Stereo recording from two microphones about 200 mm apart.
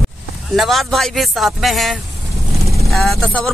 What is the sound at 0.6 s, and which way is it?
A man's voice, centre (ahead or behind).